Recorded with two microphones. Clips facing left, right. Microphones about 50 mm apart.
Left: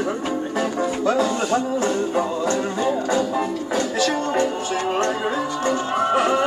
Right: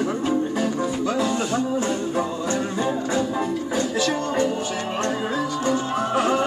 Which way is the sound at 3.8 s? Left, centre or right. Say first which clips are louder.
Left 2 dB; left.